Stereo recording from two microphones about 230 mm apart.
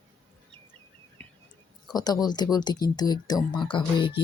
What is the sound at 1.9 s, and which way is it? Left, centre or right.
Speech, centre.